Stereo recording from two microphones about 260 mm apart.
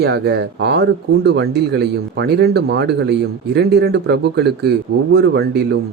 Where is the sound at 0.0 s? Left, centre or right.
Right.